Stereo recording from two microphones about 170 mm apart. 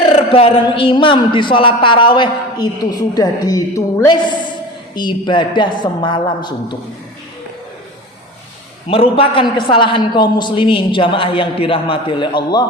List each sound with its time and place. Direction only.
0.1 s a man's voice: 35° left (ahead or behind)
8.9 s a man's voice: 35° left (ahead or behind)